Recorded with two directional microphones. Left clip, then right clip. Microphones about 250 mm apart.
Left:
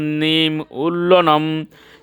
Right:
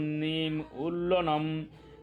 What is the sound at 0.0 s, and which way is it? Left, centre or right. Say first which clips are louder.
Mantra: left 15 dB; left.